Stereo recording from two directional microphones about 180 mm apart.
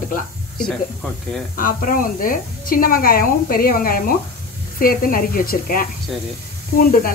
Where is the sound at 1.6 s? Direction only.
50° left (ahead or behind).